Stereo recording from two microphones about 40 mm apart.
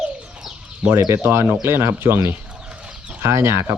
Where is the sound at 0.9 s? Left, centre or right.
Right.